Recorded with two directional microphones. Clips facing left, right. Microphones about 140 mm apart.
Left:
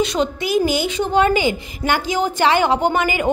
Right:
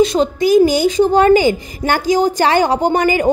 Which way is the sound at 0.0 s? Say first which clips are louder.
Right 7 dB; 35° right (ahead or behind).